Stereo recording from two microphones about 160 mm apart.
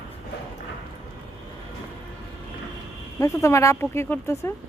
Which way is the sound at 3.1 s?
20° left (ahead or behind).